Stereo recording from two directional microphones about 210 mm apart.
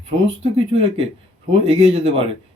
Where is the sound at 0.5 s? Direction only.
30° right (ahead or behind).